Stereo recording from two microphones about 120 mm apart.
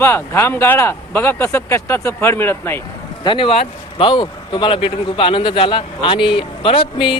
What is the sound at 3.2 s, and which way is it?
Speech, 50° left (ahead or behind).